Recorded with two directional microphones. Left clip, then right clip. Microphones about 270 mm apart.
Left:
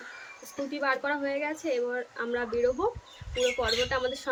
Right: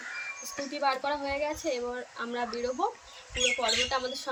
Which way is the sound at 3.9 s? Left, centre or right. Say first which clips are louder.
Left 2 dB; centre.